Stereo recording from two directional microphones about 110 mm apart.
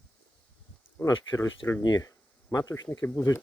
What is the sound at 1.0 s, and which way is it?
Speech, 30° left (ahead or behind).